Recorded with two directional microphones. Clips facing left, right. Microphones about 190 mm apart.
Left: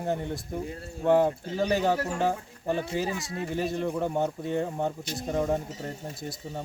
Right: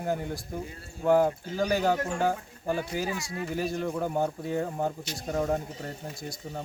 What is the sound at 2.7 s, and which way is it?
Speech, 30° left (ahead or behind).